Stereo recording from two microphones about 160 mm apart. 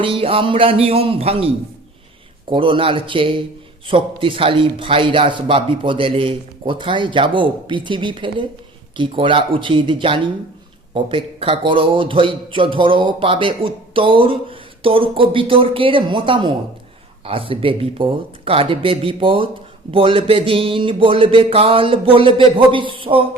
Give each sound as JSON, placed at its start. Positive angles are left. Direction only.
{"t": 0.0, "sound": "a man's voice", "side_deg": -35}